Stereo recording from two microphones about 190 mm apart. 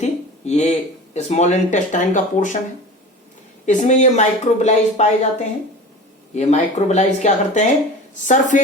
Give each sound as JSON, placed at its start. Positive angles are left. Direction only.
{"t": 0.0, "sound": "speech", "side_deg": 35}
{"t": 3.7, "sound": "speech", "side_deg": 40}